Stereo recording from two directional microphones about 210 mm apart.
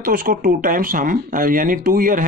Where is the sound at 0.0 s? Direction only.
40° right (ahead or behind).